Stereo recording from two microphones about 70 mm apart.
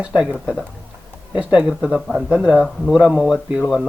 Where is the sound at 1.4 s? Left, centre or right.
Centre.